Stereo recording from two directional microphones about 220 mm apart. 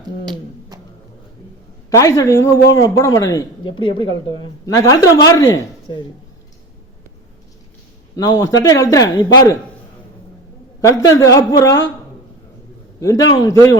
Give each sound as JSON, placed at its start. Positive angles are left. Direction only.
{"t": 1.9, "sound": "speech", "side_deg": 15}
{"t": 8.1, "sound": "speech", "side_deg": 15}
{"t": 10.8, "sound": "speech", "side_deg": 15}
{"t": 13.0, "sound": "speech", "side_deg": 15}